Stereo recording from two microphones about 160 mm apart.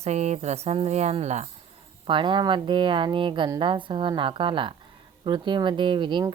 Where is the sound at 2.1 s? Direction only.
30° right (ahead or behind).